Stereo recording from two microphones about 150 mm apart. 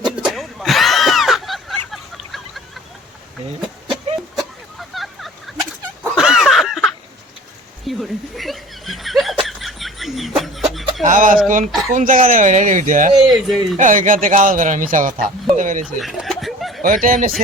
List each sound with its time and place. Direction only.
0.3 s a sound: centre (ahead or behind)
4.4 s a sound: centre (ahead or behind)
7.9 s chuckle: centre (ahead or behind)
11.0 s speech: 60° right (ahead or behind)
13.2 s speech: centre (ahead or behind)
13.7 s speech: 60° right (ahead or behind)
16.0 s snicker: centre (ahead or behind)
16.8 s speech: 65° right (ahead or behind)